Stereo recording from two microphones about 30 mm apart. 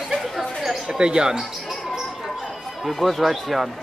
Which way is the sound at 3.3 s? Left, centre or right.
Centre.